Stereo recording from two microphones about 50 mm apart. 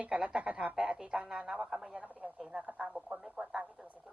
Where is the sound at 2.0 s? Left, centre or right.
Right.